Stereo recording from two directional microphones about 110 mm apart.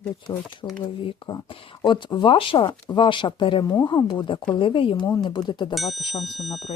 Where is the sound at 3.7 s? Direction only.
35° left (ahead or behind); by 5.0 s 55° left (ahead or behind).